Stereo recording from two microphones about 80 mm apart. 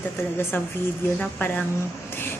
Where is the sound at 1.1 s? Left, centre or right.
Centre.